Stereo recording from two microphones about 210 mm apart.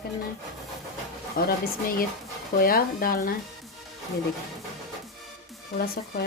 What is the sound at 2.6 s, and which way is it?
Speech, 45° left (ahead or behind).